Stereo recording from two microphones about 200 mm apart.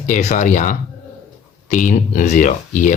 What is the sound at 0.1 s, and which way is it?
Speech, 35° left (ahead or behind).